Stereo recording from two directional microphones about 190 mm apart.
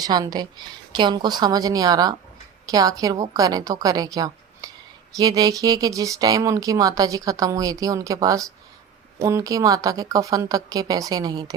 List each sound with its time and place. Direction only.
0.0 s speech: 20° right (ahead or behind)